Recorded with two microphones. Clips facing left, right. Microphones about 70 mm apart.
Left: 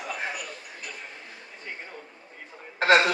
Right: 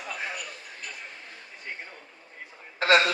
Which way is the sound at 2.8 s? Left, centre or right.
Left.